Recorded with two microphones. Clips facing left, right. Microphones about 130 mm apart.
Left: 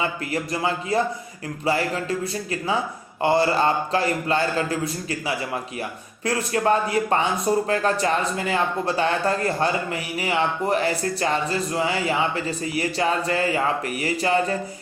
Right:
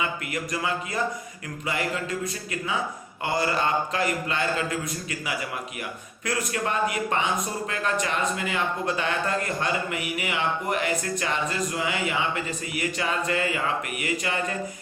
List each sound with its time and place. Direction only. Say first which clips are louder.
0.0 s speech: left 4 dB; 30° left (ahead or behind)